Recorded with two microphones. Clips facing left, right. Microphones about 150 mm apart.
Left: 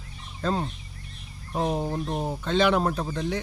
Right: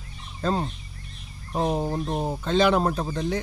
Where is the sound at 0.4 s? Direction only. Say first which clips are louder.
Right 1 dB; 35° right (ahead or behind).